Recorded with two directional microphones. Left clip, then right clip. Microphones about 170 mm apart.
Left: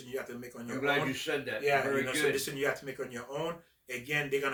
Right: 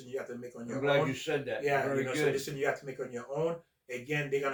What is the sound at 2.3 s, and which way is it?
Speech, 20° left (ahead or behind).